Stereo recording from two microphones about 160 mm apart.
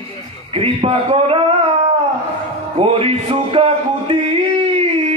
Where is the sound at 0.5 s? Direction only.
35° right (ahead or behind).